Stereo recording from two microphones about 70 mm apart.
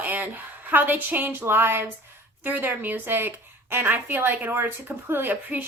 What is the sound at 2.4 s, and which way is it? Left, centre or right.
A woman's voice, right.